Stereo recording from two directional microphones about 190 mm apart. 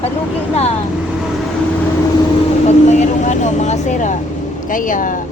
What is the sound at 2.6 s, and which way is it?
Speech, 35° left (ahead or behind).